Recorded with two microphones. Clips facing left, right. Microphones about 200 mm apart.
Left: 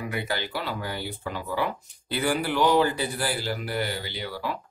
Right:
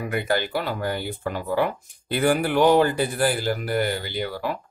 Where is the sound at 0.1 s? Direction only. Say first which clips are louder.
Right 10 dB; 50° right (ahead or behind).